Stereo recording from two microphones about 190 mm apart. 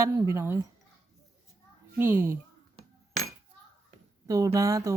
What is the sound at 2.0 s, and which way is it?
Speech, 10° right (ahead or behind).